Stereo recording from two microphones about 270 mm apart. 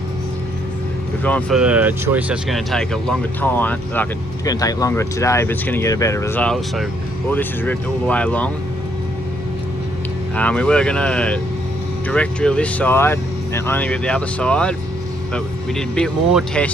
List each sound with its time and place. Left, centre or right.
1.2 s speech: centre
10.3 s speech: centre